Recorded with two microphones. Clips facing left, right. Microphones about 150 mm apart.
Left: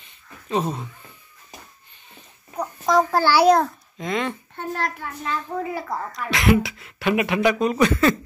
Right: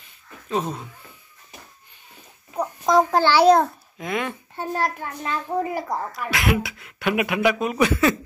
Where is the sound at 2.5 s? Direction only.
10° right (ahead or behind).